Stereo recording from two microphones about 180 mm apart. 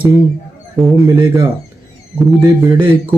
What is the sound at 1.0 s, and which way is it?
Speech, 15° right (ahead or behind).